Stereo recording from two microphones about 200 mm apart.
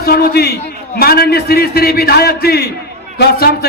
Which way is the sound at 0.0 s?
50° left (ahead or behind).